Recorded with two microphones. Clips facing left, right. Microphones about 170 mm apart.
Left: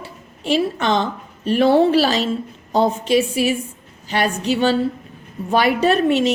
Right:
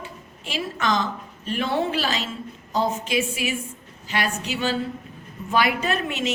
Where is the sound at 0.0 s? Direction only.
35° left (ahead or behind).